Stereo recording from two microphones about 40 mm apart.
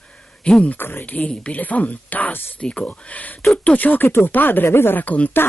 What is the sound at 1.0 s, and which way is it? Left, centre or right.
Speech, left.